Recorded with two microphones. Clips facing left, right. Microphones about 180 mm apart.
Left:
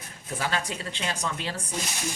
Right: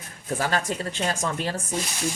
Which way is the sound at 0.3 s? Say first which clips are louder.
Right 4 dB; 45° right (ahead or behind).